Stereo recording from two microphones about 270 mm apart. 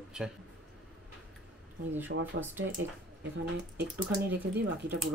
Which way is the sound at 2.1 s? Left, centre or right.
Right.